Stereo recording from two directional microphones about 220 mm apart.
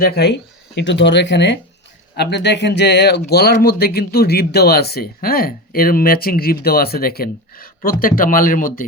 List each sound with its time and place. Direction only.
0.0 s speech: 45° left (ahead or behind)